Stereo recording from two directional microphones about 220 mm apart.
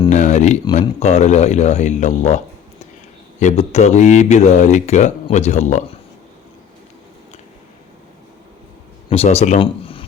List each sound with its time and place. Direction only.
0.1 s speech: 35° left (ahead or behind)
9.0 s speech: 30° left (ahead or behind)